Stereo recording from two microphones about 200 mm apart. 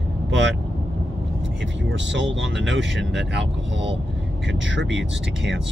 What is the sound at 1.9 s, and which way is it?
Speech, 65° right (ahead or behind).